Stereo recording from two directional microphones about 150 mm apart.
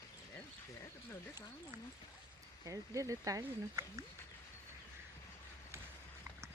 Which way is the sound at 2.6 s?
20° right (ahead or behind).